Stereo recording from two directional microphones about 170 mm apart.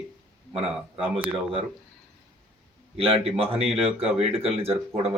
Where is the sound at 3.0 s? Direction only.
35° right (ahead or behind).